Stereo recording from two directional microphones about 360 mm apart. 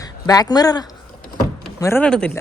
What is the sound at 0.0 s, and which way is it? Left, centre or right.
Speech, centre.